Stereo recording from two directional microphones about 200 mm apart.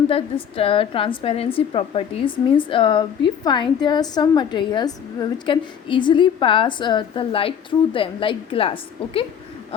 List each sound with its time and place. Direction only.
0.1 s a woman's voice: 30° left (ahead or behind)